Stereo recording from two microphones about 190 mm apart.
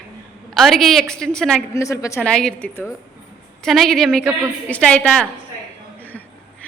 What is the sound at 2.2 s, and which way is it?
A woman's voice, 5° left (ahead or behind).